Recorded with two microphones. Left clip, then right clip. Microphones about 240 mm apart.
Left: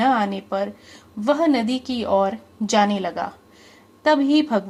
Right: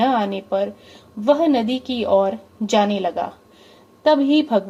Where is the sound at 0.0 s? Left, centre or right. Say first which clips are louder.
Even; left.